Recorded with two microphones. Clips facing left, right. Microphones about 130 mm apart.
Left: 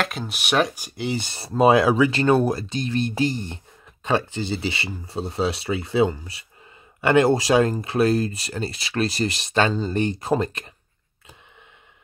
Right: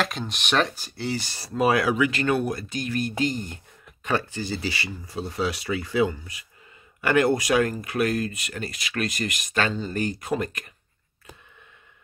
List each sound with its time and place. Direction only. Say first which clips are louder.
0.0 s speech: left 1 dB; 5° left (ahead or behind); by 10.7 s 30° left (ahead or behind)